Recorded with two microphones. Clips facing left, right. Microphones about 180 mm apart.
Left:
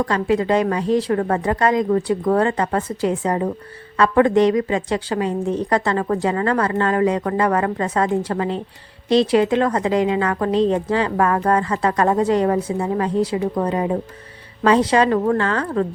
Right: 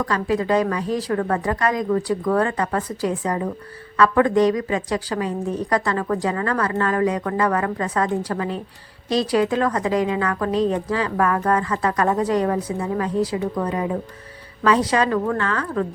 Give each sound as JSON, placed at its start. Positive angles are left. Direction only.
{"t": 0.0, "sound": "a woman's voice", "side_deg": 25}